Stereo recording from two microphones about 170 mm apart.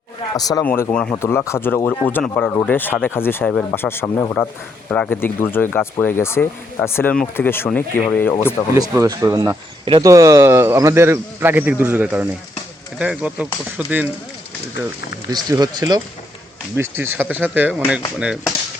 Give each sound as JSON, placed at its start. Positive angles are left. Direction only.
{"t": 0.3, "sound": "speech", "side_deg": 20}
{"t": 0.6, "sound": "speech", "side_deg": 10}
{"t": 8.7, "sound": "speech", "side_deg": -20}
{"t": 15.3, "sound": "speech", "side_deg": -25}
{"t": 16.7, "sound": "speech", "side_deg": -10}